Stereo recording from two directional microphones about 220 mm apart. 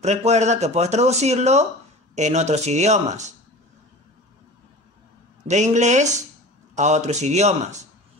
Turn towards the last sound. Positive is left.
turn(degrees=-30)  # may be behind; listen again after turning